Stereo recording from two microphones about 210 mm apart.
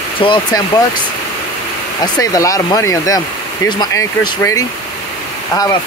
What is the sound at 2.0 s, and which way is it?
Speech, 15° left (ahead or behind).